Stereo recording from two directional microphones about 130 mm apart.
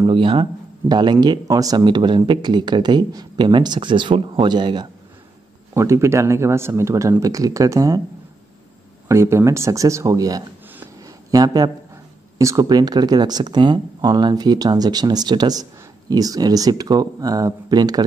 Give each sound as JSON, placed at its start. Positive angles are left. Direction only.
{"t": 0.0, "sound": "speech", "side_deg": -40}
{"t": 5.8, "sound": "speech", "side_deg": -20}
{"t": 9.0, "sound": "speech", "side_deg": -20}
{"t": 11.1, "sound": "a sound", "side_deg": -30}
{"t": 12.4, "sound": "speech", "side_deg": -25}